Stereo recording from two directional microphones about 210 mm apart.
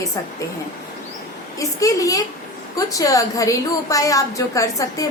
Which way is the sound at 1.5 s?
15° left (ahead or behind).